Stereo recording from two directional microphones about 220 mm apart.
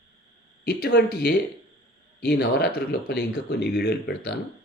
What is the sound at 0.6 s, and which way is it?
Speech, 45° left (ahead or behind).